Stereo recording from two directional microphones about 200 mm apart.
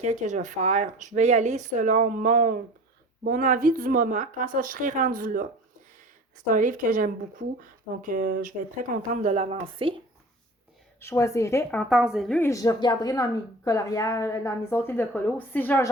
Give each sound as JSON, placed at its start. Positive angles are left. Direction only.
{"t": 0.0, "sound": "speech", "side_deg": -35}
{"t": 6.5, "sound": "speech", "side_deg": -40}
{"t": 11.0, "sound": "a woman's voice", "side_deg": 15}
{"t": 11.8, "sound": "a woman's voice", "side_deg": 0}